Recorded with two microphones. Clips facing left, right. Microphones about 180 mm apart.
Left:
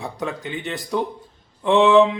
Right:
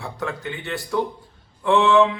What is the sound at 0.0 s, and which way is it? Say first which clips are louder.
Speech: left 1 dB; 15° left (ahead or behind).